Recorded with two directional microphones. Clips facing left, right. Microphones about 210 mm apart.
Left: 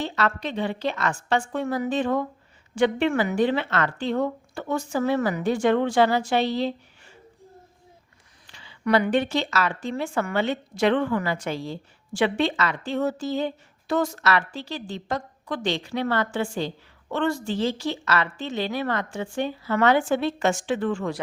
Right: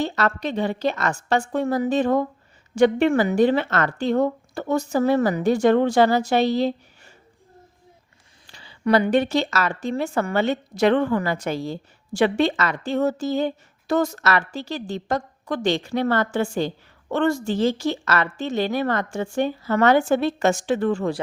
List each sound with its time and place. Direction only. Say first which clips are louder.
0.0 s a woman's voice: right 3 dB; 40° right (ahead or behind)
8.4 s a woman's voice: right 3 dB; 35° right (ahead or behind)